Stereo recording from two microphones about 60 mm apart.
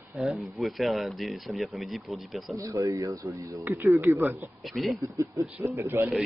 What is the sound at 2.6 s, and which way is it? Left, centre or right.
Speech, right.